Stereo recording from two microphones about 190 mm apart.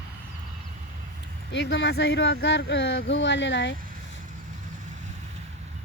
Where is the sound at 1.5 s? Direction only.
65° left (ahead or behind).